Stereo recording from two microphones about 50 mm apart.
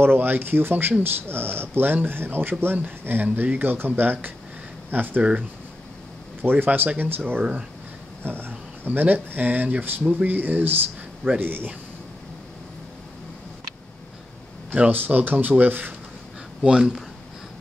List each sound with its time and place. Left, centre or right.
0.0 s speech: right
6.4 s speech: right
14.9 s speech: right
16.6 s speech: centre